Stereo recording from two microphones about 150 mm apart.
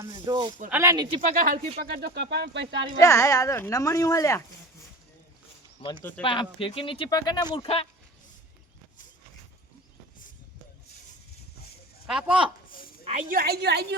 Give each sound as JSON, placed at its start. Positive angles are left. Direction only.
{"t": 0.0, "sound": "speech", "side_deg": -30}
{"t": 0.7, "sound": "speech", "side_deg": -15}
{"t": 1.2, "sound": "speech", "side_deg": -60}
{"t": 1.8, "sound": "speech", "side_deg": -90}
{"t": 3.0, "sound": "speech", "side_deg": 20}
{"t": 6.0, "sound": "speech", "side_deg": 15}
{"t": 6.2, "sound": "speech", "side_deg": 35}
{"t": 12.0, "sound": "speech", "side_deg": -5}
{"t": 13.3, "sound": "speech", "side_deg": -90}